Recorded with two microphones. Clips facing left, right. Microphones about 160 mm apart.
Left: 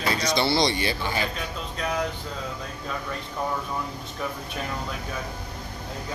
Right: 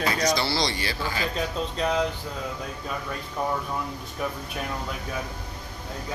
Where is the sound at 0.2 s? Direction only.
25° left (ahead or behind).